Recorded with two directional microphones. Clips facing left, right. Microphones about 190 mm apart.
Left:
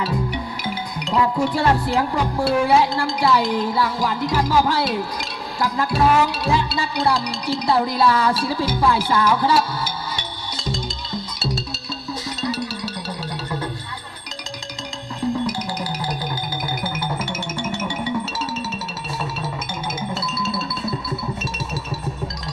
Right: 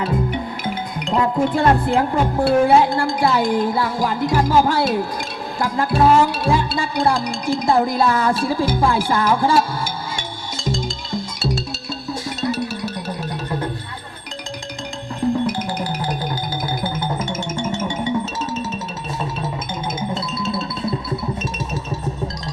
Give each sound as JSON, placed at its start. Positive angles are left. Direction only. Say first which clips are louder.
{"t": 1.4, "sound": "speech", "louder": "right 3 dB", "side_deg": -50}
{"t": 5.5, "sound": "music", "louder": "right 2 dB", "side_deg": -50}
{"t": 15.2, "sound": "music", "louder": "right 3 dB", "side_deg": -55}
{"t": 17.7, "sound": "music", "louder": "right 3 dB", "side_deg": -25}